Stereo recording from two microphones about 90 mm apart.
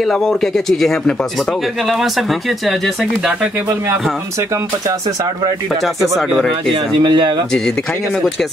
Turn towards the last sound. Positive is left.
turn(degrees=-60)  # may be behind; listen again after turning